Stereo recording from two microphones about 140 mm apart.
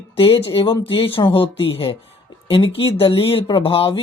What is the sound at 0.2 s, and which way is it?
Speech, 40° left (ahead or behind).